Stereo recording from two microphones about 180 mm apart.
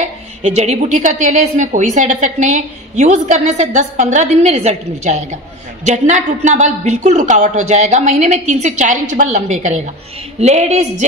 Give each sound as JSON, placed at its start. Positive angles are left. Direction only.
{"t": 0.0, "sound": "a woman's voice", "side_deg": -40}